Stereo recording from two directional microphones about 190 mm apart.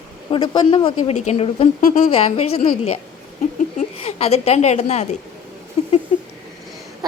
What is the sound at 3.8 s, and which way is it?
A woman's voice, 35° left (ahead or behind).